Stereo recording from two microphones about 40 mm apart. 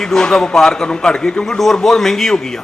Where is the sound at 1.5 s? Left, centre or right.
Centre.